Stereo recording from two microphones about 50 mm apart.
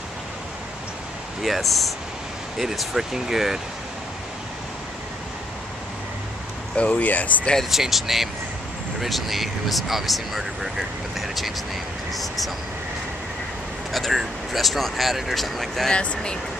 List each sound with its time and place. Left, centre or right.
1.4 s speech: centre
6.8 s speech: left
7.7 s speech: centre
13.9 s speech: centre
15.9 s speech: left